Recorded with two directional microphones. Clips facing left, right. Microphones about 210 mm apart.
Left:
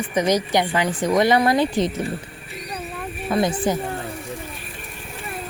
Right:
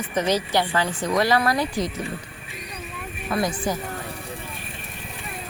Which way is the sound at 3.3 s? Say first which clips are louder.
Left 4 dB; 25° left (ahead or behind).